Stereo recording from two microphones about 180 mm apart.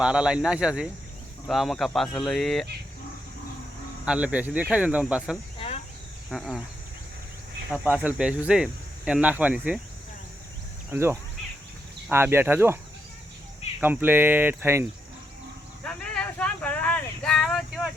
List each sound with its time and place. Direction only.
0.0 s speech: 5° right (ahead or behind)
4.0 s speech: 5° right (ahead or behind)
5.5 s cricket: 35° left (ahead or behind)
6.3 s speech: centre (ahead or behind)
7.7 s speech: 10° right (ahead or behind)
10.9 s speech: 15° right (ahead or behind)
13.8 s speech: 10° right (ahead or behind)
15.8 s a sound: 5° left (ahead or behind)